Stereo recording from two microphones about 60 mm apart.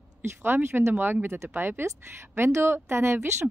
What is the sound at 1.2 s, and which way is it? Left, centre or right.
Speech, right.